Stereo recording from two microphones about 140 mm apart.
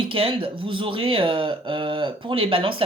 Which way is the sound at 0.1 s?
40° right (ahead or behind).